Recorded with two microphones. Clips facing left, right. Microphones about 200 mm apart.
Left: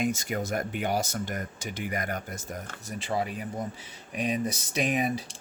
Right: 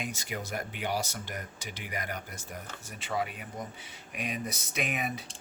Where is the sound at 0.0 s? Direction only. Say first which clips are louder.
Left 9 dB; 45° left (ahead or behind).